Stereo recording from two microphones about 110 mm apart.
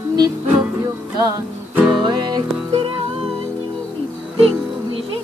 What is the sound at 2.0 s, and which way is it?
Music, 40° right (ahead or behind).